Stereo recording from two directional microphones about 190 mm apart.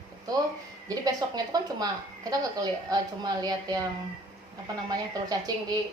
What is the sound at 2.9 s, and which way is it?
Speech, 20° right (ahead or behind).